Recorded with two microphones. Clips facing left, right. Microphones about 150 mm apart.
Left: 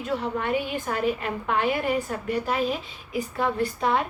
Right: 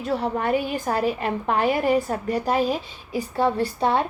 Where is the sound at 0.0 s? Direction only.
35° right (ahead or behind).